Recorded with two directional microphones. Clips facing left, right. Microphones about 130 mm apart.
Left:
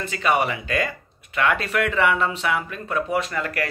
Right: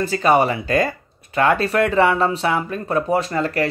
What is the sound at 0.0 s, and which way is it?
Speech, 35° right (ahead or behind).